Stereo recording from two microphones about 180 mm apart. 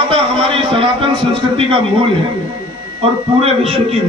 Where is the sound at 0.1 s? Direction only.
30° right (ahead or behind).